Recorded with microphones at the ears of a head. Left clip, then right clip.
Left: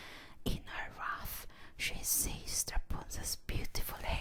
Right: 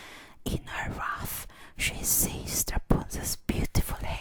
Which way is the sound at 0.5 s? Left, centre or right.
Right.